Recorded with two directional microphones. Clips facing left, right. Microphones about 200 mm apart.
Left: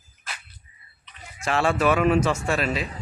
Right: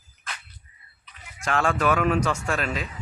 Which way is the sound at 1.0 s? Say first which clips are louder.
Left 2 dB; 5° left (ahead or behind).